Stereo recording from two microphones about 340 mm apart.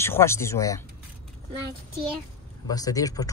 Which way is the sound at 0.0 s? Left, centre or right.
Centre.